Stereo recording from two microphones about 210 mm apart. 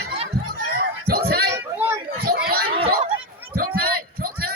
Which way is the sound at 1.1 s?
45° right (ahead or behind).